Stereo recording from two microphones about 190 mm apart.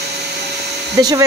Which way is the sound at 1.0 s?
20° right (ahead or behind).